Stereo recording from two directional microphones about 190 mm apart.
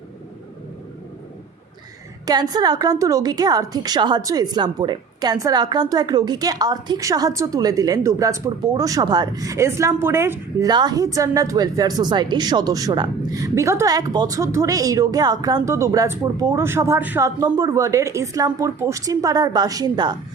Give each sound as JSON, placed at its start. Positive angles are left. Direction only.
{"t": 2.2, "sound": "a woman's voice", "side_deg": -20}